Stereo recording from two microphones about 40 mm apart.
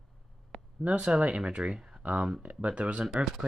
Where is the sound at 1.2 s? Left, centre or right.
Right.